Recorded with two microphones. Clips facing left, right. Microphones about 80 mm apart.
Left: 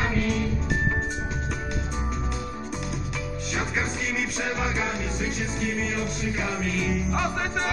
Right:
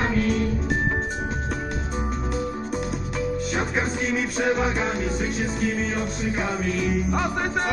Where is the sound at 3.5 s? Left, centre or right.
Right.